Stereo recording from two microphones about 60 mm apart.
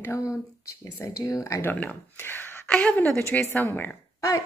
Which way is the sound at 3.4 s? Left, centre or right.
Left.